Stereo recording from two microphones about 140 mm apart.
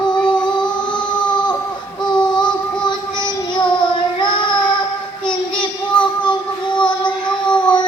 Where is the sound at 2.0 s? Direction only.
5° left (ahead or behind).